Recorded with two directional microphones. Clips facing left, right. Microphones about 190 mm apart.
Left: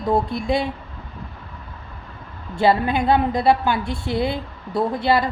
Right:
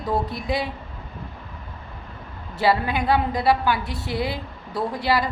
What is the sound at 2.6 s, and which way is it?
A woman's voice, 25° left (ahead or behind).